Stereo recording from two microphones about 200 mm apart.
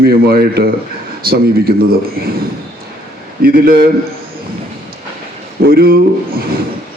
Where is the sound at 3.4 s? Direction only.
45° right (ahead or behind).